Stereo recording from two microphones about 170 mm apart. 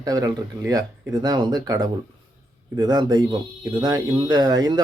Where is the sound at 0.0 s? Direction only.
20° right (ahead or behind).